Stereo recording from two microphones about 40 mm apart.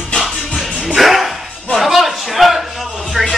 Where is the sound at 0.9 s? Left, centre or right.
Centre.